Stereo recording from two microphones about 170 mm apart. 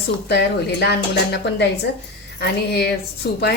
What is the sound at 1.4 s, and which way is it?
Speech, 90° left.